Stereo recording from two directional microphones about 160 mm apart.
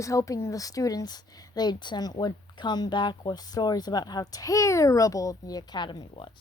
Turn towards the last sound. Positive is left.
turn(degrees=30)  # may be behind; listen again after turning